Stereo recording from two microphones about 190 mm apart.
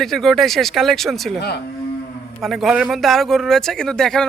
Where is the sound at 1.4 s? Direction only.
60° left (ahead or behind).